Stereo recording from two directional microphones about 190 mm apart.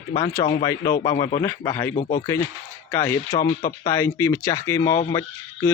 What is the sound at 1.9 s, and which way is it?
Speech, 40° left (ahead or behind).